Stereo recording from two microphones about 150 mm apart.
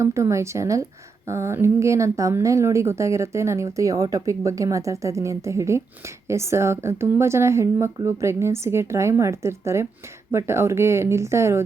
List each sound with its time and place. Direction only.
0.0 s a woman's voice: 20° right (ahead or behind)